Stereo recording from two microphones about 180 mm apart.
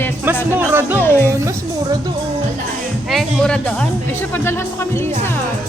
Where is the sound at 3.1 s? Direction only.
Centre (ahead or behind).